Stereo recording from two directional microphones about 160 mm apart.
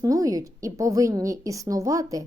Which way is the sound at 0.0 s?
20° right (ahead or behind).